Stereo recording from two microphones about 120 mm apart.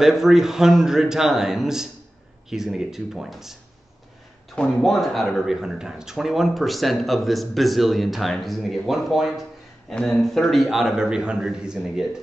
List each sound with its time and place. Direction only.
0.0 s speech: 5° right (ahead or behind)
4.6 s speech: 5° left (ahead or behind)